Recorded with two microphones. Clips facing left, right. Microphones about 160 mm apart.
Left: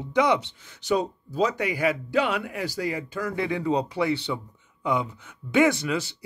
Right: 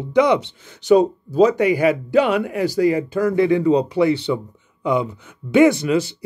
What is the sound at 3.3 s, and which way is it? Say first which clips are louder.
Speech: right 10 dB; 35° right (ahead or behind).